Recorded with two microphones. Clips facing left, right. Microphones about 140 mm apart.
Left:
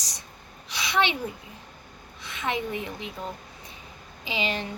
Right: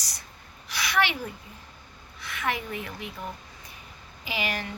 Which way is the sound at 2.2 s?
20° left (ahead or behind).